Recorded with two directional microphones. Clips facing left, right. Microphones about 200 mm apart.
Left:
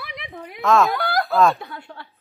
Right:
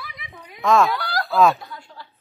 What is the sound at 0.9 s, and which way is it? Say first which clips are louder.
Snicker: left 4 dB; 55° left (ahead or behind).